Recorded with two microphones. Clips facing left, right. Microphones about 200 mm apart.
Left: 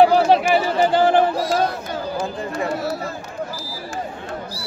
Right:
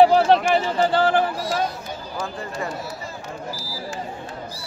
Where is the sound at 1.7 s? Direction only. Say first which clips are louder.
Left 7 dB; 70° left (ahead or behind).